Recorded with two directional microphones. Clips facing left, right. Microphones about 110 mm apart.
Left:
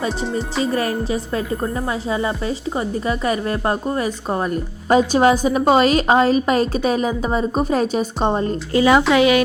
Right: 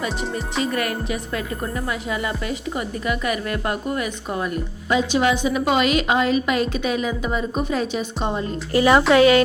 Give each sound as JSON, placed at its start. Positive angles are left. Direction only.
{"t": 0.6, "sound": "speech", "side_deg": 30}
{"t": 8.7, "sound": "speech", "side_deg": 20}